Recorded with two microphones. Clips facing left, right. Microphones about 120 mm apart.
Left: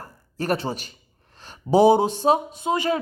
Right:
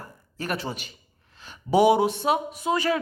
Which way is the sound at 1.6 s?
30° left (ahead or behind).